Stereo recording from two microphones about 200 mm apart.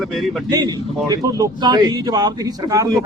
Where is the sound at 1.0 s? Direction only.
15° right (ahead or behind).